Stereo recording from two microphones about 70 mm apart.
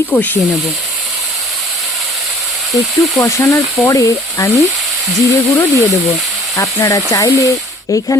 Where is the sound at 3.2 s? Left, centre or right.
Left.